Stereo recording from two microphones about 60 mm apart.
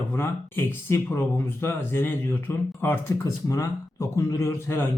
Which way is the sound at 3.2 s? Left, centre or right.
Left.